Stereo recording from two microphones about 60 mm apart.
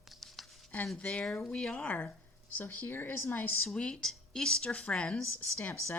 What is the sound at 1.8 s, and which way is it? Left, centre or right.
Speech, left.